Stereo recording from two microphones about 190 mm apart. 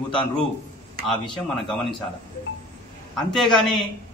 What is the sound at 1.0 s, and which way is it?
Speech, centre (ahead or behind).